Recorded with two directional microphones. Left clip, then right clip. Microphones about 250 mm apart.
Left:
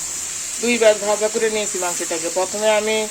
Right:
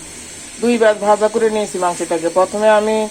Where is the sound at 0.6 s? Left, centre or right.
Centre.